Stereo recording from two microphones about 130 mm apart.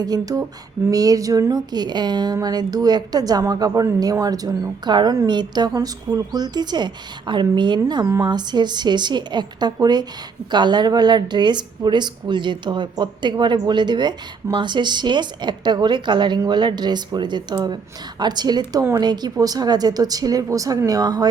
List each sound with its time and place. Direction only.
0.0 s a woman's voice: 30° right (ahead or behind)